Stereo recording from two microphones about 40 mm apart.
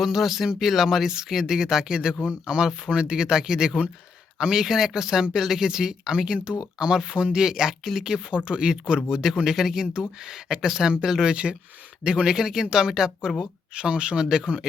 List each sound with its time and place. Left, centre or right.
0.0 s speech: centre; by 14.7 s right